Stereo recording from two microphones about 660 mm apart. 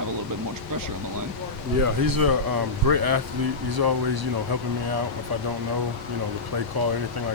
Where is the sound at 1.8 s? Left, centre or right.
Right.